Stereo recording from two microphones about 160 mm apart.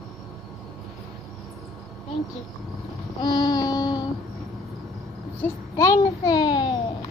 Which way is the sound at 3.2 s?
25° left (ahead or behind).